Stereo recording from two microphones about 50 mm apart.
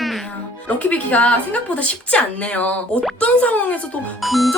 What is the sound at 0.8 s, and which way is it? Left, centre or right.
Speech, left.